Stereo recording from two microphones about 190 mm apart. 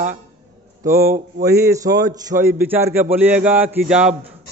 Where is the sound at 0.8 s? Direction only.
15° right (ahead or behind).